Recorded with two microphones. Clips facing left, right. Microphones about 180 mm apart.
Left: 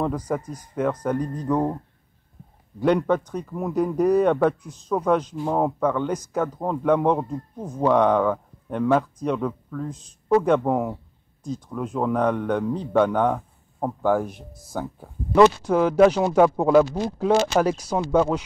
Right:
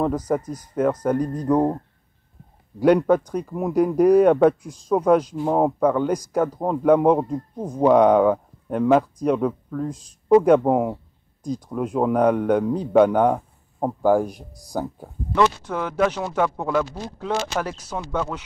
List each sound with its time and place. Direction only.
0.7 s speech: 5° right (ahead or behind)
2.8 s speech: 10° right (ahead or behind)
15.7 s speech: 30° left (ahead or behind)
17.2 s speech: 15° left (ahead or behind)
17.9 s speech: 30° left (ahead or behind)